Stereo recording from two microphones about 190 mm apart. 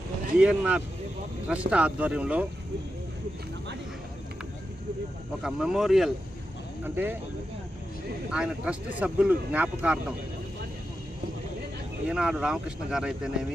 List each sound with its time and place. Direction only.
0.3 s speech: 5° right (ahead or behind)
5.4 s speech: 5° right (ahead or behind)
8.3 s speech: 5° right (ahead or behind)
12.0 s speech: 5° right (ahead or behind)